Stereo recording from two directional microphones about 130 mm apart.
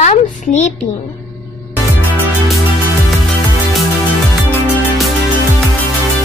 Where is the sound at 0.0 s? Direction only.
60° left (ahead or behind).